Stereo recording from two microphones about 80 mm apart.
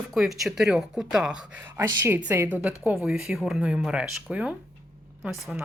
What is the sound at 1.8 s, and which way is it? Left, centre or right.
Speech, right.